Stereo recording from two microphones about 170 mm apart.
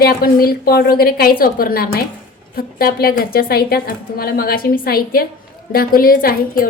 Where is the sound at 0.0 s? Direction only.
60° left (ahead or behind).